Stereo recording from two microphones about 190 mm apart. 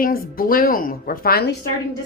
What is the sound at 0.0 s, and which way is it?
A woman's voice, 50° left (ahead or behind).